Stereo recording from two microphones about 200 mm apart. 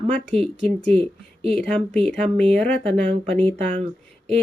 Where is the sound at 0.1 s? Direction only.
5° left (ahead or behind).